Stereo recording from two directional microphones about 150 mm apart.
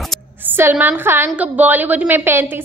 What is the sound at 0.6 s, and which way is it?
A woman's voice, 15° right (ahead or behind).